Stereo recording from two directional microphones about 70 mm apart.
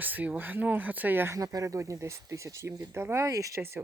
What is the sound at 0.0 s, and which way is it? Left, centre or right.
Speech, right.